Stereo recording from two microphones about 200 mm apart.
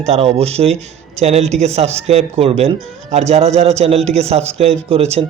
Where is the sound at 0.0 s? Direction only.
30° right (ahead or behind).